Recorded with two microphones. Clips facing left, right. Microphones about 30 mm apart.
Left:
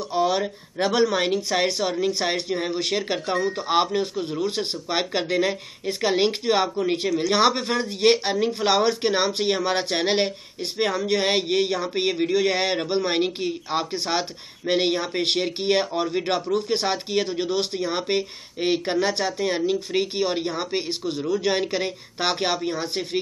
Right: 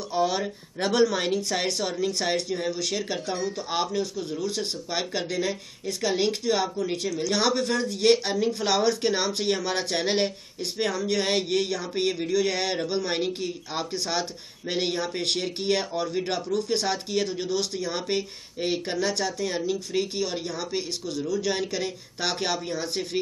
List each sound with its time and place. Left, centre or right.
0.1 s speech: centre